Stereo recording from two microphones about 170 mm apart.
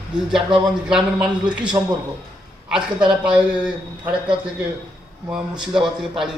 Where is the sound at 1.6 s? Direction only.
25° right (ahead or behind).